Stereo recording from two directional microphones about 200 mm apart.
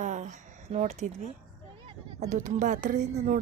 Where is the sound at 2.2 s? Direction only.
35° right (ahead or behind).